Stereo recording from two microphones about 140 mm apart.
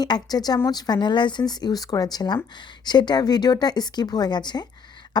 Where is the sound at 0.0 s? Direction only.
30° left (ahead or behind).